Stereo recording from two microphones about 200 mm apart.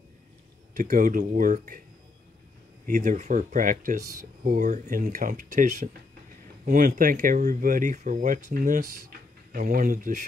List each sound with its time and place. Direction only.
0.7 s speech: 40° right (ahead or behind)
2.9 s speech: 40° right (ahead or behind)
4.0 s speech: 15° right (ahead or behind)
4.5 s speech: 40° right (ahead or behind)